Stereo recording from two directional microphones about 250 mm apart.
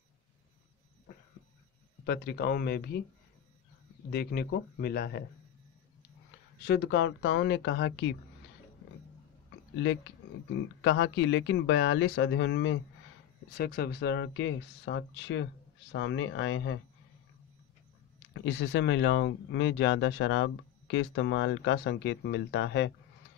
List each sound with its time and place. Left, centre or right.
2.0 s speech: left
4.1 s speech: left
6.6 s speech: left
10.5 s speech: left
18.3 s speech: left